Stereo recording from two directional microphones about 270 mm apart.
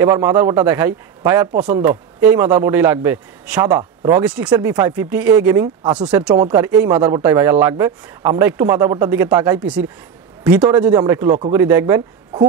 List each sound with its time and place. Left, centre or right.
0.0 s a man's voice: centre